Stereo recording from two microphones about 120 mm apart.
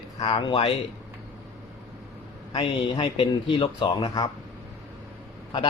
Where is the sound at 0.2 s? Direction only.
45° left (ahead or behind).